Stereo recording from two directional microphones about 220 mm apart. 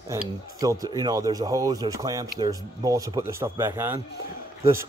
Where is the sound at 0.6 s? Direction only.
15° right (ahead or behind).